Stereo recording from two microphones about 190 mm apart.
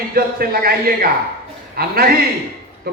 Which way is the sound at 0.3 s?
50° right (ahead or behind).